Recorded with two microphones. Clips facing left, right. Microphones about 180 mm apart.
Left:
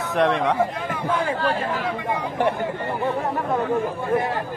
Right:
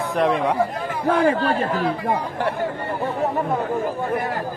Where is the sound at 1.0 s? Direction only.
55° right (ahead or behind).